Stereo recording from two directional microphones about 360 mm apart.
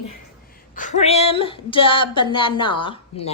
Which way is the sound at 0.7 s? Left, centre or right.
Left.